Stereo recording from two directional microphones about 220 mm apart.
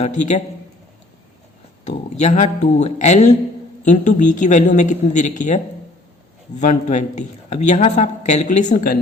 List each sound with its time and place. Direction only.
0.0 s speech: 35° left (ahead or behind)
2.0 s speech: 35° left (ahead or behind)
6.6 s speech: 30° left (ahead or behind)